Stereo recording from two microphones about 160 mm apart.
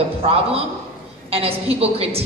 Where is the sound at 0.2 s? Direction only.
40° right (ahead or behind).